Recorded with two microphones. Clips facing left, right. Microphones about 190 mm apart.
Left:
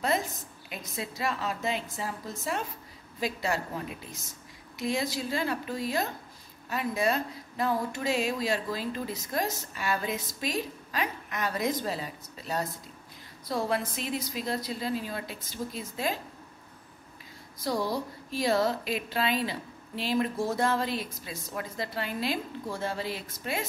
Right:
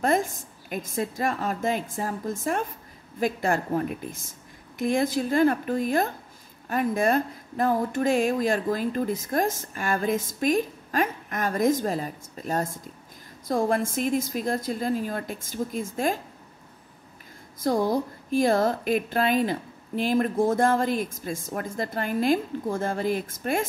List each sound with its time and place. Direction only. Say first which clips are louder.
0.0 s speech: right 5 dB; 50° right (ahead or behind)
17.6 s speech: right 6 dB; 50° right (ahead or behind)